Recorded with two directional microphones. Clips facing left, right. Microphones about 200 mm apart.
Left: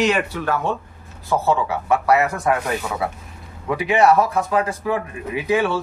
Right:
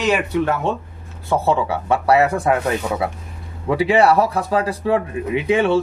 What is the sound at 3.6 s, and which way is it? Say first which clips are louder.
Speech: right 2 dB; 30° right (ahead or behind).